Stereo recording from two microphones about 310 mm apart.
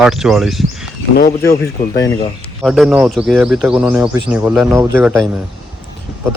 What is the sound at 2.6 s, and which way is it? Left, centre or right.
Speech, centre.